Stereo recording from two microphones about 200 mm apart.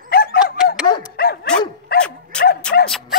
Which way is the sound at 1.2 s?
50° left (ahead or behind).